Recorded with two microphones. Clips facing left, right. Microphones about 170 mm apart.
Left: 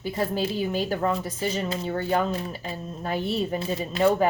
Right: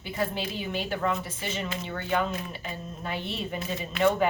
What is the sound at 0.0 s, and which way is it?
A woman's voice, 40° left (ahead or behind).